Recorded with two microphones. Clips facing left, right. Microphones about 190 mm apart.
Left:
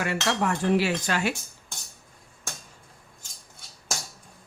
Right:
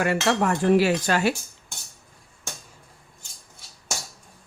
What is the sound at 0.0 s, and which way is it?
Speech, 45° right (ahead or behind).